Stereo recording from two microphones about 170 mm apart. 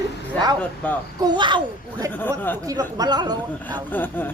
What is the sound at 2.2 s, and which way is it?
Speech, 10° left (ahead or behind).